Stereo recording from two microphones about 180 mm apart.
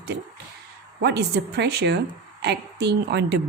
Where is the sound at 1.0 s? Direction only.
70° right (ahead or behind).